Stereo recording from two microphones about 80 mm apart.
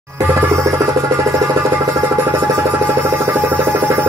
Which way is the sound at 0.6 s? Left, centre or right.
Right.